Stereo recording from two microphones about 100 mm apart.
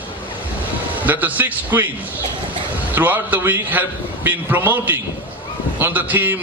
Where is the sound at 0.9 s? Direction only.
15° right (ahead or behind).